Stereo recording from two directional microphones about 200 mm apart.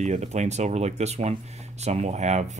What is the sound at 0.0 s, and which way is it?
Speech, 35° right (ahead or behind).